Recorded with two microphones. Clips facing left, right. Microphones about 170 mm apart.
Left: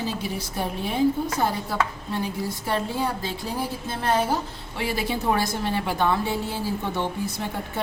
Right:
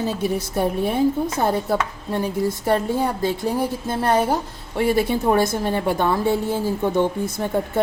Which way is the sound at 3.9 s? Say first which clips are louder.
Right 3 dB; 45° right (ahead or behind).